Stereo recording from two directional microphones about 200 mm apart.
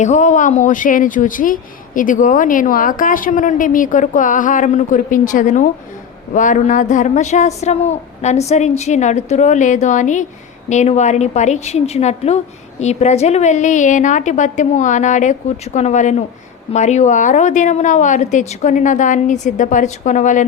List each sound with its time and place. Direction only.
0.0 s speech: 35° left (ahead or behind)